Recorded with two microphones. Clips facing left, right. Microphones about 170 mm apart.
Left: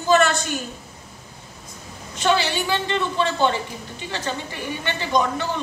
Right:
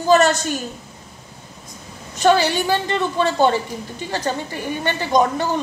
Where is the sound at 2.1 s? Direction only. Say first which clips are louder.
Right 5 dB; 45° right (ahead or behind).